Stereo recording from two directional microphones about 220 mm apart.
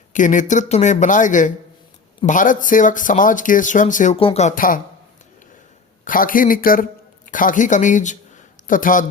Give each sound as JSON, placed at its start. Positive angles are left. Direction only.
{"t": 0.1, "sound": "speech", "side_deg": 35}
{"t": 6.1, "sound": "speech", "side_deg": 40}